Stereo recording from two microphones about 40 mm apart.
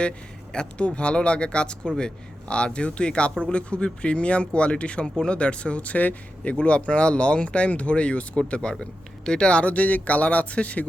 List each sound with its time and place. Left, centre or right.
0.5 s speech: left